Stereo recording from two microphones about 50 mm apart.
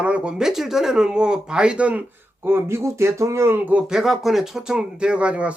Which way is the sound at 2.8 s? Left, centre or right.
Right.